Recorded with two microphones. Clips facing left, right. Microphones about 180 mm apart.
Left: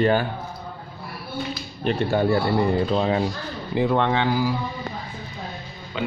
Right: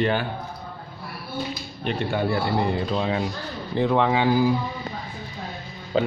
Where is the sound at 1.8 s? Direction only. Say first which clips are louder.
Left 4 dB; 40° left (ahead or behind).